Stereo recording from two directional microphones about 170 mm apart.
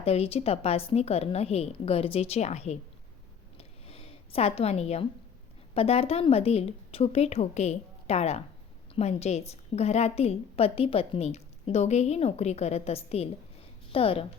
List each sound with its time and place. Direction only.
0.0 s a woman's voice: 35° left (ahead or behind)
3.6 s a sound: 35° left (ahead or behind)
5.7 s a woman's voice: 35° left (ahead or behind)